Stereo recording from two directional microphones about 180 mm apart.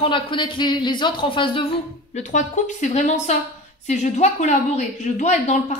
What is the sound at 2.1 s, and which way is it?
A woman's voice, 45° left (ahead or behind).